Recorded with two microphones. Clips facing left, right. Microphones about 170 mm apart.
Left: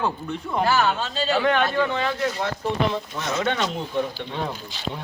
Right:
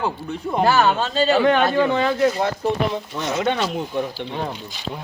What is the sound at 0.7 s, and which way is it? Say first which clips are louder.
Speech: right 4 dB; 50° right (ahead or behind).